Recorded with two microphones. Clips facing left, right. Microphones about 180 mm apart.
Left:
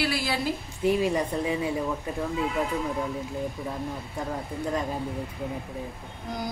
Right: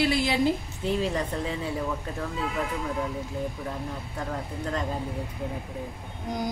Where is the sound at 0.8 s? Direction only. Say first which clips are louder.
Left 5 dB; 10° left (ahead or behind).